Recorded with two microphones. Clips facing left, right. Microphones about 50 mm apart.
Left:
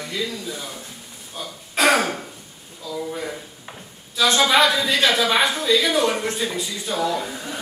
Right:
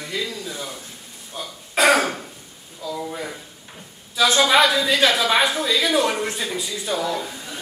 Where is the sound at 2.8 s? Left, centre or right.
Centre.